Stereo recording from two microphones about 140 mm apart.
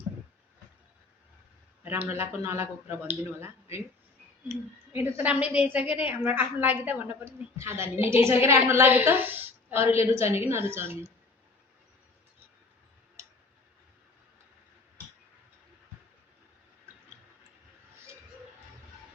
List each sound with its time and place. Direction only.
1.8 s a sound: 15° right (ahead or behind)
2.1 s speech: 20° right (ahead or behind)
4.9 s a woman's voice: 15° right (ahead or behind)